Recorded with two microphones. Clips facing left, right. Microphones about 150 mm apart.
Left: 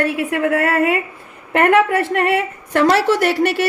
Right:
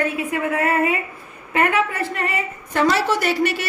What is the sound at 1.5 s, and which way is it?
A woman's voice, 65° left (ahead or behind).